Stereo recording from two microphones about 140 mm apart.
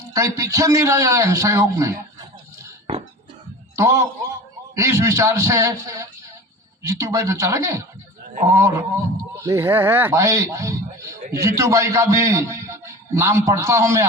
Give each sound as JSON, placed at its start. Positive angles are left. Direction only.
{"t": 0.0, "sound": "a man's voice", "side_deg": -20}
{"t": 3.8, "sound": "a man's voice", "side_deg": -20}